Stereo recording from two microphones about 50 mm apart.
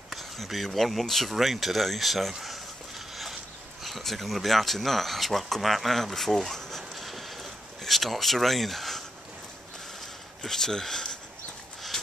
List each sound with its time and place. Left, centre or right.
0.1 s speech: centre
2.3 s a sound: centre
3.8 s speech: centre
10.4 s speech: centre